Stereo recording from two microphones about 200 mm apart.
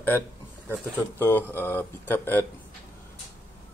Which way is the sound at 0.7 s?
10° left (ahead or behind).